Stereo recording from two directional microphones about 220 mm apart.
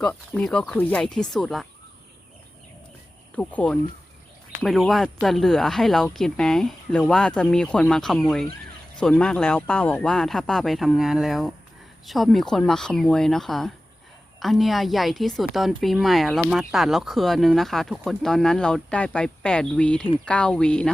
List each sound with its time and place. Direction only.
0.0 s speech: 5° left (ahead or behind)
3.3 s speech: 5° left (ahead or behind)